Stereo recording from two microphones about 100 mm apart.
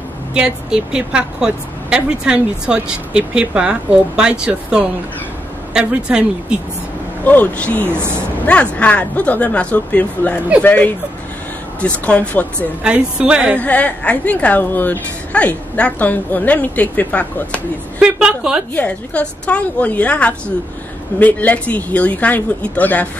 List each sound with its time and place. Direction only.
0.3 s speech: 10° right (ahead or behind)
7.2 s a woman's voice: 15° left (ahead or behind)
7.8 s speech: 25° right (ahead or behind)
8.7 s a woman's voice: 15° left (ahead or behind)
12.8 s speech: 15° right (ahead or behind)
13.6 s a woman's voice: 15° left (ahead or behind)
17.9 s speech: 10° right (ahead or behind)
18.8 s a woman's voice: 10° left (ahead or behind)